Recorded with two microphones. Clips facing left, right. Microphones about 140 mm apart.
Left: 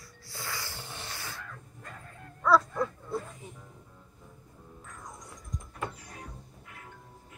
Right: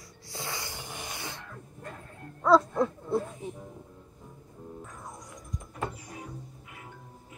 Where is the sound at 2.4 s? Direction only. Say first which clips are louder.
Right 3 dB; 25° right (ahead or behind).